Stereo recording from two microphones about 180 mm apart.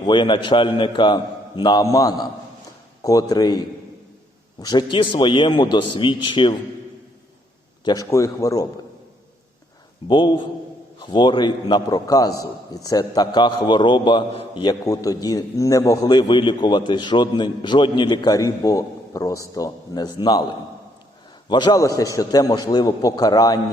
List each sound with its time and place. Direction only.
0.0 s a man's voice: 25° left (ahead or behind)
4.6 s a man's voice: 25° left (ahead or behind)
7.9 s a man's voice: 20° left (ahead or behind)
10.1 s a man's voice: 25° left (ahead or behind)